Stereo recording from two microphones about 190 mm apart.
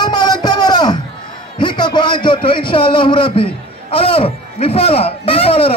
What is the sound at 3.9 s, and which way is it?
A man's voice, 30° left (ahead or behind).